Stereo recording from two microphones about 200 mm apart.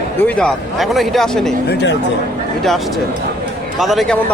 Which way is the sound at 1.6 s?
60° left (ahead or behind).